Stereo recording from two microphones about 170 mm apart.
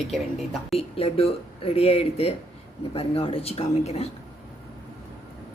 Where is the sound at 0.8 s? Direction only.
35° left (ahead or behind).